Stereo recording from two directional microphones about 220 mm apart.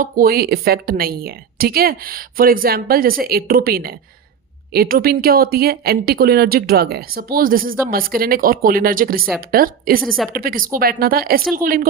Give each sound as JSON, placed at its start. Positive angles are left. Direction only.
{"t": 0.0, "sound": "speech", "side_deg": -40}
{"t": 10.0, "sound": "a woman's voice", "side_deg": 0}
{"t": 10.3, "sound": "speech", "side_deg": -40}